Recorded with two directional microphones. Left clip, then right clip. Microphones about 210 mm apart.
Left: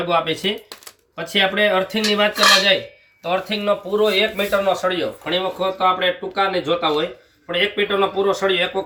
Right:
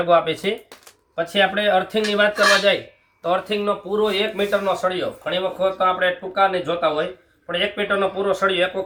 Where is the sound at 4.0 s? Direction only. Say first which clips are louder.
Left 2 dB; centre (ahead or behind).